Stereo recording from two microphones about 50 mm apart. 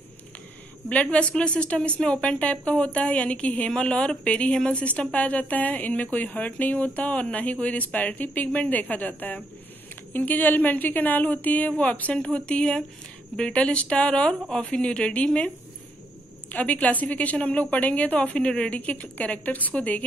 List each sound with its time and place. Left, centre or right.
0.8 s a woman's voice: left